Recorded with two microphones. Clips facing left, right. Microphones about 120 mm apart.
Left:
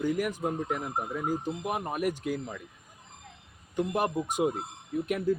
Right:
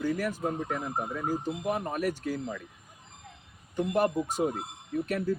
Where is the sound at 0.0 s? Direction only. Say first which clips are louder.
Left 1 dB; 15° left (ahead or behind).